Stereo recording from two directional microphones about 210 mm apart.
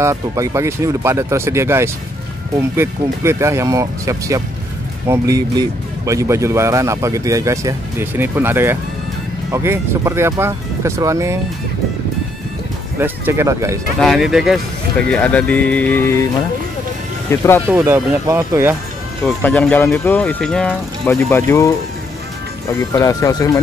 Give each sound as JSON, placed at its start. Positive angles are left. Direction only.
{"t": 0.0, "sound": "speech", "side_deg": -15}
{"t": 13.0, "sound": "speech", "side_deg": -10}
{"t": 13.9, "sound": "speech", "side_deg": 0}
{"t": 17.3, "sound": "speech", "side_deg": 10}
{"t": 17.6, "sound": "speech", "side_deg": -10}
{"t": 19.2, "sound": "speech", "side_deg": 5}
{"t": 22.8, "sound": "speech", "side_deg": 15}